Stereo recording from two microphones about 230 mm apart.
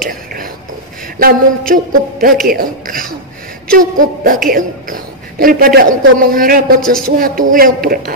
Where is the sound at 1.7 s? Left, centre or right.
Right.